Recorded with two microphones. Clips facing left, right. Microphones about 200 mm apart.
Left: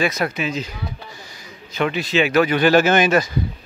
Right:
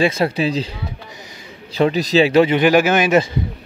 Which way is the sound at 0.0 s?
30° right (ahead or behind).